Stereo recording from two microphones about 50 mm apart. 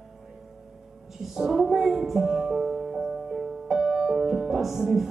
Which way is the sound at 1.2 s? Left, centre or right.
Centre.